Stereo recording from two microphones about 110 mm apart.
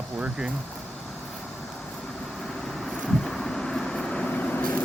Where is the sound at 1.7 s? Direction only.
5° left (ahead or behind).